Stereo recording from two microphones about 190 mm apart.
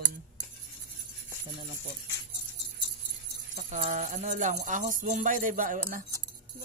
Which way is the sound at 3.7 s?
40° right (ahead or behind).